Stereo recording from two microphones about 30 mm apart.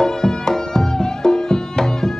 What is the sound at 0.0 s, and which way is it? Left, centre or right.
Music, left.